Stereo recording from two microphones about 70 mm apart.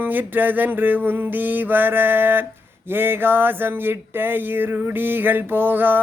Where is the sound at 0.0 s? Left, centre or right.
Right.